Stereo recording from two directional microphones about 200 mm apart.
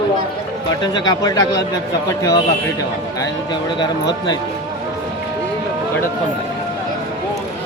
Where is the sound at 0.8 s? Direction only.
20° left (ahead or behind).